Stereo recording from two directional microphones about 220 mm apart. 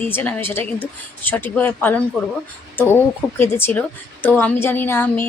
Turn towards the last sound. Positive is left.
turn(degrees=10)  # may be behind; listen again after turning